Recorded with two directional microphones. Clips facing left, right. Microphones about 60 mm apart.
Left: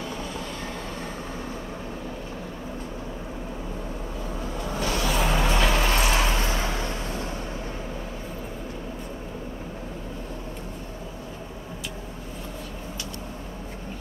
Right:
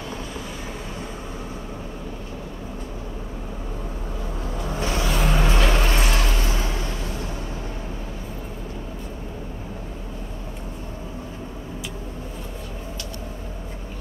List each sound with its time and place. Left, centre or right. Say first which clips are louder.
4.7 s vehicle: right 1 dB; right
5.0 s music: right 1 dB; centre